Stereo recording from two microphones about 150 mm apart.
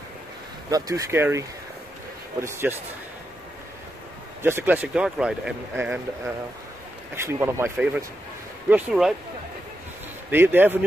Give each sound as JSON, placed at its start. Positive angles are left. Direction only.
{"t": 0.7, "sound": "speech", "side_deg": -25}
{"t": 2.7, "sound": "speech", "side_deg": -5}
{"t": 4.4, "sound": "speech", "side_deg": -15}
{"t": 10.3, "sound": "speech", "side_deg": -15}